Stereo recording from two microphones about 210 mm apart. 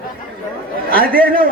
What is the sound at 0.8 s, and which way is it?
Speech, 45° right (ahead or behind).